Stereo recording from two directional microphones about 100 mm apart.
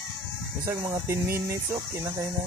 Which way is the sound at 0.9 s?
30° right (ahead or behind).